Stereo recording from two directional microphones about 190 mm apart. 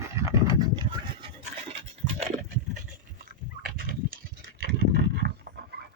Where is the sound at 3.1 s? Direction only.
55° right (ahead or behind).